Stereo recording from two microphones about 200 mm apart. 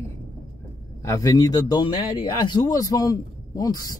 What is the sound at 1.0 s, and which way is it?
Speech, 15° left (ahead or behind).